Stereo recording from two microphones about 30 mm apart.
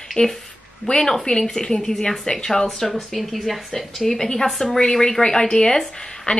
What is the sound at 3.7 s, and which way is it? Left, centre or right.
Speech, centre.